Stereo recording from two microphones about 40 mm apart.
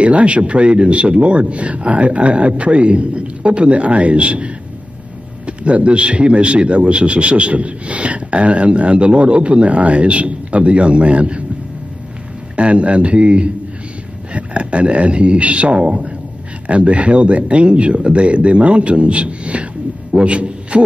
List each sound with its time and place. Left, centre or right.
0.0 s a man's voice: right
5.5 s a man's voice: right
12.5 s a man's voice: right